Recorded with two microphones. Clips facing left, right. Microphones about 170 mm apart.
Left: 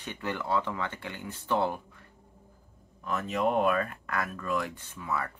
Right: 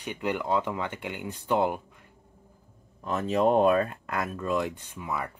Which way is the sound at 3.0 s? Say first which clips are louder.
Right 5 dB; 30° right (ahead or behind).